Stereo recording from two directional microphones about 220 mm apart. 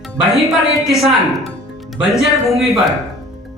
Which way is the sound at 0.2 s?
Centre (ahead or behind).